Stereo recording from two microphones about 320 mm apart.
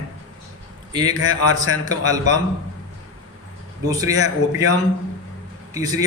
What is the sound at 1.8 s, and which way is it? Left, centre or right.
Speech, centre.